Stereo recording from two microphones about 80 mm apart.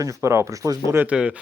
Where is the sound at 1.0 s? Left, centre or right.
Centre.